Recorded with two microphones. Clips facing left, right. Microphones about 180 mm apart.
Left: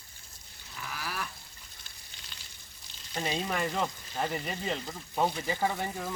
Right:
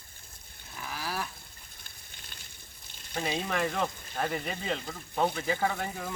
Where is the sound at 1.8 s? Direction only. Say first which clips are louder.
Right 1 dB; 55° right (ahead or behind).